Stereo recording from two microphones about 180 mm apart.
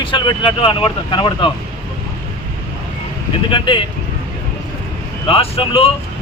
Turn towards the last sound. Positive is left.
turn(degrees=30)  # may be behind; listen again after turning